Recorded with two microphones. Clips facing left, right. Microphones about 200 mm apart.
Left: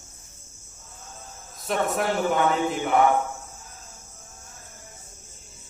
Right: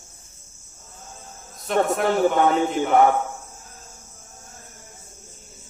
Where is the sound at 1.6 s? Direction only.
Centre (ahead or behind).